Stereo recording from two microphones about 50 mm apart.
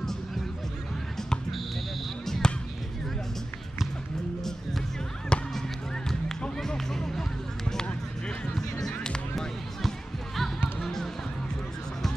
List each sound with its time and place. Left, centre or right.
2.2 s basketball bounce: centre
5.3 s basketball bounce: centre
6.6 s music: centre
8.5 s music: centre